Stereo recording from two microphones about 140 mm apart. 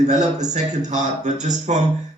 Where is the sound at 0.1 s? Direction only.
55° right (ahead or behind).